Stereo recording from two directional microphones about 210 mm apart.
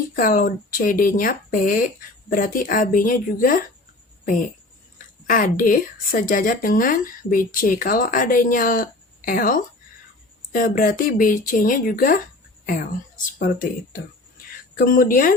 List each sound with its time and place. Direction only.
0.2 s a woman's voice: 40° left (ahead or behind)
5.2 s a woman's voice: 40° left (ahead or behind)